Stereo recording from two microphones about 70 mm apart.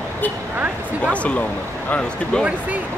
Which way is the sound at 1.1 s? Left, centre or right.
Centre.